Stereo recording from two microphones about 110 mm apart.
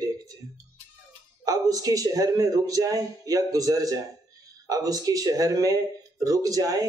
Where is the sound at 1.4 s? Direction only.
35° right (ahead or behind).